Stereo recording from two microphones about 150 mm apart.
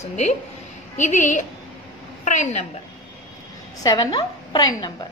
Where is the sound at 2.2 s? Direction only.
50° left (ahead or behind).